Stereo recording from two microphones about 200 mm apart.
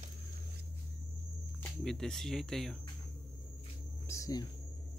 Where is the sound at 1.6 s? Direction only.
Centre (ahead or behind).